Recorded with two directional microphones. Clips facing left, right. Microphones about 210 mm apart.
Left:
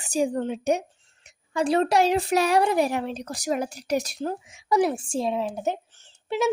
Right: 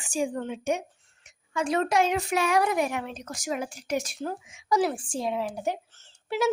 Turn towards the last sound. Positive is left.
turn(degrees=20)  # may be behind; listen again after turning